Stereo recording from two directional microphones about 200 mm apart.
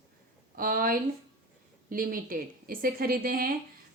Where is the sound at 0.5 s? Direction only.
45° right (ahead or behind).